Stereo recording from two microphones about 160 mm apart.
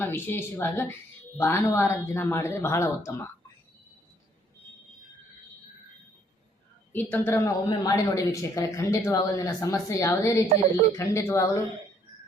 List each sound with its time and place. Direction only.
0.0 s speech: 15° left (ahead or behind)
6.9 s speech: 10° left (ahead or behind)